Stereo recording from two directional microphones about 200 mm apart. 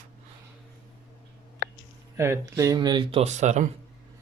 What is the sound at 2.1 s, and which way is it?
Speech, 15° right (ahead or behind).